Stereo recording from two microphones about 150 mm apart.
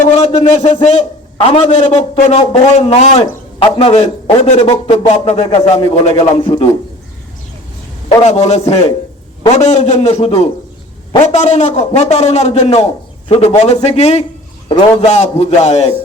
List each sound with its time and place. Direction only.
0.0 s a sound: 45° left (ahead or behind)
0.4 s a man's voice: 50° left (ahead or behind)
8.2 s a man's voice: 50° left (ahead or behind)